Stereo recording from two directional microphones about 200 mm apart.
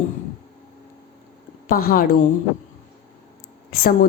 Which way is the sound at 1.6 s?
45° left (ahead or behind).